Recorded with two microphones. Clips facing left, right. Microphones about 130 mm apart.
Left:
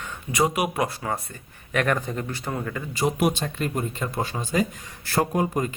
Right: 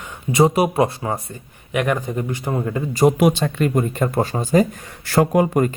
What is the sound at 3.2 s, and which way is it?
Speech, 90° right.